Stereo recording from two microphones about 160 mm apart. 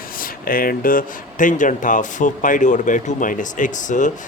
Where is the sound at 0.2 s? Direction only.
65° left (ahead or behind).